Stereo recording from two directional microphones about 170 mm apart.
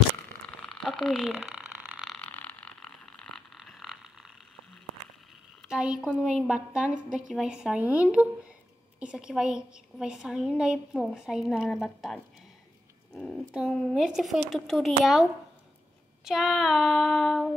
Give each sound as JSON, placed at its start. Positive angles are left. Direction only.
{"t": 0.5, "sound": "a sound", "side_deg": 5}
{"t": 5.6, "sound": "a woman's voice", "side_deg": -5}
{"t": 16.3, "sound": "a woman's voice", "side_deg": 0}